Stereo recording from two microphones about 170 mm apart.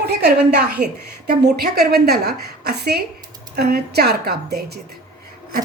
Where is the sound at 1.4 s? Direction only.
70° right (ahead or behind).